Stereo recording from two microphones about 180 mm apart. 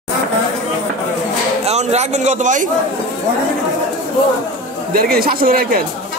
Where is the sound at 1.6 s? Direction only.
35° right (ahead or behind).